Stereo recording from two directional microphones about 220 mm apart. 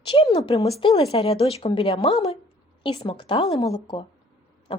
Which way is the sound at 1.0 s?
25° left (ahead or behind).